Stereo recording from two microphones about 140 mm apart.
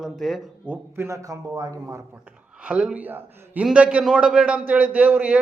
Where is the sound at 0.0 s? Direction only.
Centre (ahead or behind).